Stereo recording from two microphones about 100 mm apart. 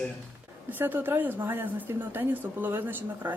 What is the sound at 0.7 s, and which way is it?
A woman's voice, 20° right (ahead or behind).